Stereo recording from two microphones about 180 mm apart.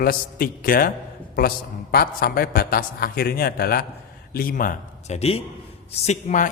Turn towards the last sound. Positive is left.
turn(degrees=40)  # may be behind; listen again after turning